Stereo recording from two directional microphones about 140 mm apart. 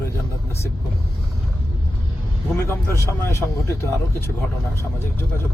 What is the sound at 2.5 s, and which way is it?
Speech, 15° left (ahead or behind).